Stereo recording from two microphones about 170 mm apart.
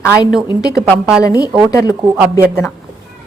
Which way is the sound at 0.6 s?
20° left (ahead or behind).